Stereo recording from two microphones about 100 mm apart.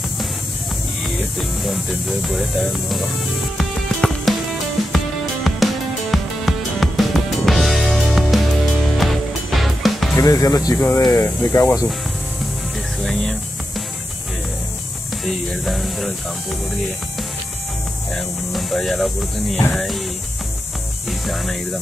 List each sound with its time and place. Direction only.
1.6 s speech: centre (ahead or behind)
3.5 s music: centre (ahead or behind)
10.1 s speech: 35° left (ahead or behind)
13.0 s music: 5° left (ahead or behind)
15.2 s speech: centre (ahead or behind)
18.1 s speech: centre (ahead or behind)